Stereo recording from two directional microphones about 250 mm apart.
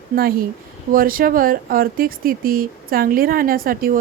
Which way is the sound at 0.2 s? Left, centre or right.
Right.